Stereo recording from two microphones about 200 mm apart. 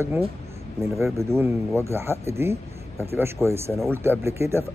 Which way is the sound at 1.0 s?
15° right (ahead or behind).